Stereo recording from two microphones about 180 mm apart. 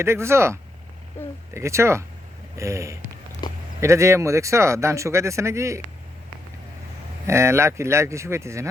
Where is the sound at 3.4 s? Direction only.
25° left (ahead or behind).